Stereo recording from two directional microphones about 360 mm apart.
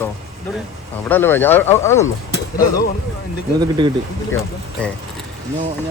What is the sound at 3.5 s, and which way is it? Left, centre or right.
Speech, centre.